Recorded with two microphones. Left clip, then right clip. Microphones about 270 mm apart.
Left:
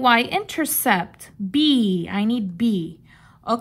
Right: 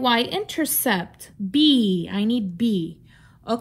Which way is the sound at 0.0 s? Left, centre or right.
Left.